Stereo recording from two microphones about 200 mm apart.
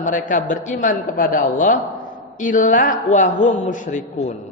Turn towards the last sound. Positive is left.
turn(degrees=40)  # may be behind; listen again after turning